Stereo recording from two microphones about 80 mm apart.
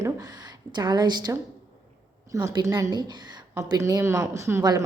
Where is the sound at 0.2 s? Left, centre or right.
Right.